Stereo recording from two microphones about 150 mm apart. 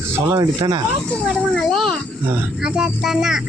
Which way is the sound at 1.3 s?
5° left (ahead or behind).